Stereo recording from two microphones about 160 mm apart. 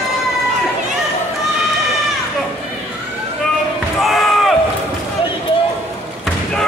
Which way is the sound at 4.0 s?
Centre (ahead or behind).